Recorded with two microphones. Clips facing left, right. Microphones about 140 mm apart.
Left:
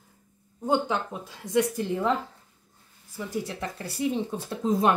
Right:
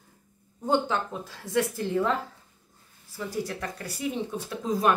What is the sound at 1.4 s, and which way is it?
Speech, 15° left (ahead or behind).